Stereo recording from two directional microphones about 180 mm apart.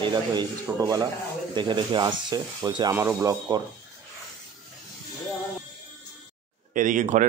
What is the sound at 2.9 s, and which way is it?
Speech, 10° right (ahead or behind).